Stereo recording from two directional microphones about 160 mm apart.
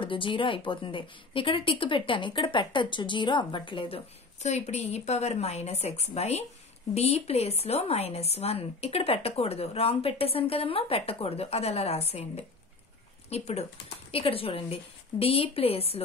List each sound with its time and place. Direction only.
0.0 s a woman's voice: 30° left (ahead or behind)